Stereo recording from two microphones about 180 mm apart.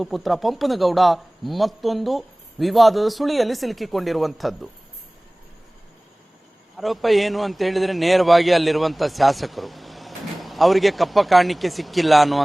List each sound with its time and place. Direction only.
0.0 s a man's voice: centre (ahead or behind)
6.7 s a man's voice: centre (ahead or behind)